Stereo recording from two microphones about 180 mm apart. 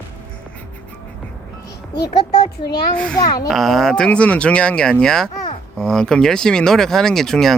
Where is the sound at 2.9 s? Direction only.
5° left (ahead or behind).